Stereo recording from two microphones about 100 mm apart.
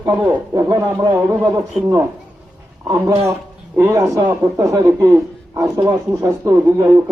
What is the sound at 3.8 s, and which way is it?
A man's voice, 25° right (ahead or behind).